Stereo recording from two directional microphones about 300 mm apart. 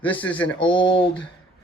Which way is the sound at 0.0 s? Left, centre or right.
Centre.